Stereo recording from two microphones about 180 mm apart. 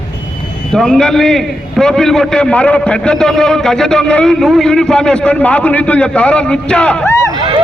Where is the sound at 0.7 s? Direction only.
5° left (ahead or behind).